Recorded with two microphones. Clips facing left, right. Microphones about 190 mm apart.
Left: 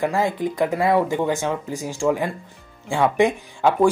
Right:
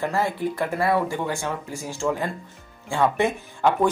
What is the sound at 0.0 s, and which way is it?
Speech, 15° left (ahead or behind).